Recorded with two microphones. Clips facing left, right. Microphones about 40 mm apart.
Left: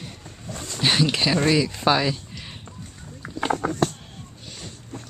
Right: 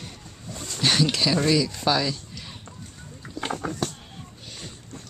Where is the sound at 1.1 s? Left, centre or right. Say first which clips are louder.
Left 2 dB; left.